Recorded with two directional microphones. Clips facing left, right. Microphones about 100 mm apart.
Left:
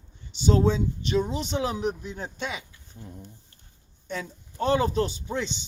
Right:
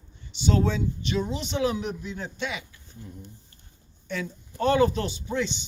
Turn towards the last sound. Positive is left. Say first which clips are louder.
# even
turn(degrees=35)  # may be behind; listen again after turning